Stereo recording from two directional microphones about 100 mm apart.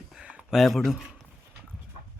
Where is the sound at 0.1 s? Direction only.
10° right (ahead or behind).